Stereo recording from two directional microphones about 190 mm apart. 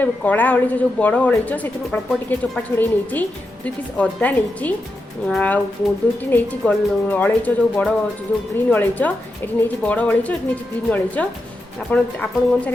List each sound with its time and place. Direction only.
0.0 s a woman's voice: 10° left (ahead or behind)